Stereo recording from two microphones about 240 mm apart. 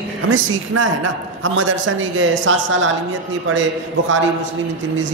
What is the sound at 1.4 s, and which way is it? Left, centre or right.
A woman's voice, right.